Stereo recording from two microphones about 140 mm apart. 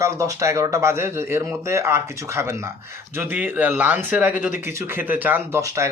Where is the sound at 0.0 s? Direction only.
20° right (ahead or behind).